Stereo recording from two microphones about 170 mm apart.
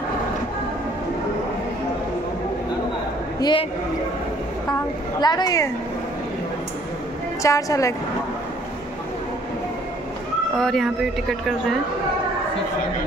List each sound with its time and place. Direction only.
3.3 s a woman's voice: 25° left (ahead or behind)
5.2 s a woman's voice: 25° left (ahead or behind)
7.4 s a woman's voice: 20° left (ahead or behind)
10.6 s speech: centre (ahead or behind)